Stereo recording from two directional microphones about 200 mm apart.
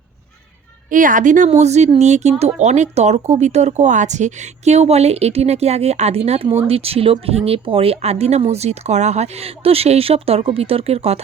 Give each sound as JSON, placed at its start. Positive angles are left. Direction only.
{"t": 0.9, "sound": "speech", "side_deg": -40}